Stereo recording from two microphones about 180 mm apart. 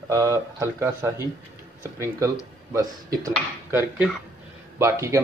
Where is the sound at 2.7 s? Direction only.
15° right (ahead or behind).